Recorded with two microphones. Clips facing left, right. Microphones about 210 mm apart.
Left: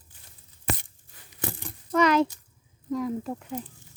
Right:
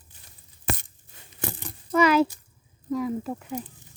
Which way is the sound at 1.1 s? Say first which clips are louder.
Right 3 dB; 25° right (ahead or behind).